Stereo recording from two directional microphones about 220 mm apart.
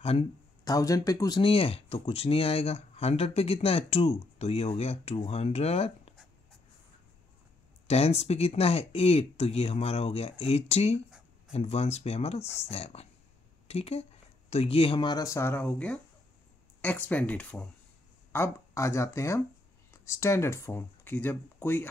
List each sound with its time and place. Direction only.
0.7 s speech: 15° left (ahead or behind)
7.8 s speech: 30° left (ahead or behind)
11.1 s a sound: 5° right (ahead or behind)
11.5 s speech: 30° left (ahead or behind); by 21.8 s 10° left (ahead or behind)